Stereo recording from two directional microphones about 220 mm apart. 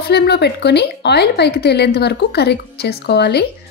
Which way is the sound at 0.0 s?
45° left (ahead or behind).